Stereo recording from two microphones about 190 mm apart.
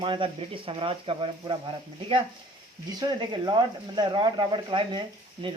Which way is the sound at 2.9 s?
20° right (ahead or behind).